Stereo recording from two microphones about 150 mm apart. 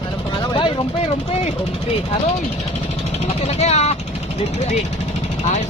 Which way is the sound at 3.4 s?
45° left (ahead or behind).